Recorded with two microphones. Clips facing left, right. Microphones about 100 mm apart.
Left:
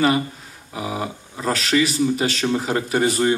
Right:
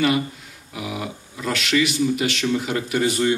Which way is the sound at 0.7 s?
35° left (ahead or behind).